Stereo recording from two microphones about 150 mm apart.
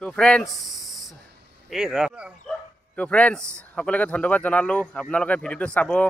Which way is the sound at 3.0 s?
10° left (ahead or behind).